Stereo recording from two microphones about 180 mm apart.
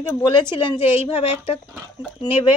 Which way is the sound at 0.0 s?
20° left (ahead or behind).